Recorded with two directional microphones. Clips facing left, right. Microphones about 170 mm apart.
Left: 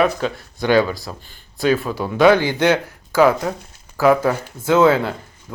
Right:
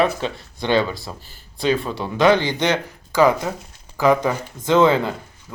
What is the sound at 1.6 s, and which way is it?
Speech, 5° left (ahead or behind).